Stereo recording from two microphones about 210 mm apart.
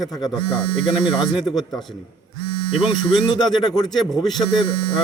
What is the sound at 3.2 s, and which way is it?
Speech, 20° left (ahead or behind).